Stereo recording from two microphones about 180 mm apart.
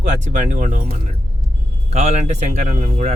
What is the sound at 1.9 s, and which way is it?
Speech, 40° right (ahead or behind).